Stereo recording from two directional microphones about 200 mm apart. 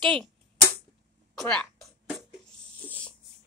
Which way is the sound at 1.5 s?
5° left (ahead or behind).